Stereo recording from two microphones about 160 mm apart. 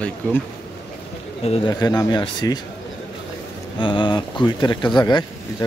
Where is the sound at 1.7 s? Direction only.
25° left (ahead or behind).